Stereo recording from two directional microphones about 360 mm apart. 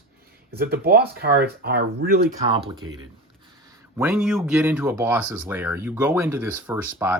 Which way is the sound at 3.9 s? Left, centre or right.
Centre.